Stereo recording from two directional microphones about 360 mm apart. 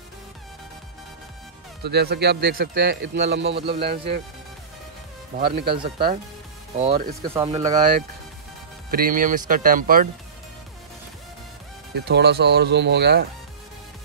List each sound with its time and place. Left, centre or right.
1.8 s speech: right
5.3 s speech: right
6.8 s speech: right
7.3 s speech: centre
8.9 s speech: right
11.9 s speech: right